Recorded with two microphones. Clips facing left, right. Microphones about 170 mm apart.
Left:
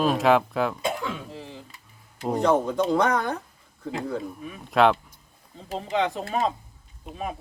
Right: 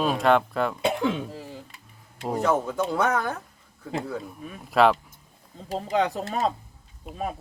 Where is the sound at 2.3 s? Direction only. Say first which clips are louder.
Left 2 dB; 5° right (ahead or behind).